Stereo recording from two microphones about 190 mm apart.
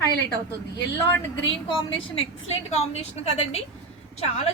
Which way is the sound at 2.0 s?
30° left (ahead or behind).